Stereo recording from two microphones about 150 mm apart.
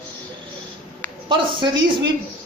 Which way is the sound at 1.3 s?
30° right (ahead or behind).